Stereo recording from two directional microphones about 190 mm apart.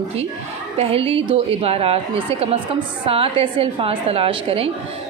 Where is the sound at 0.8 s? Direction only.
30° right (ahead or behind).